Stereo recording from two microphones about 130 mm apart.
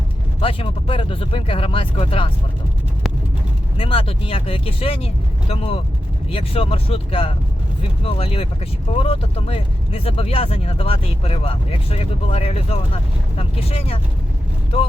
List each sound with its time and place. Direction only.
0.3 s speech: 45° left (ahead or behind)
3.8 s speech: 45° left (ahead or behind)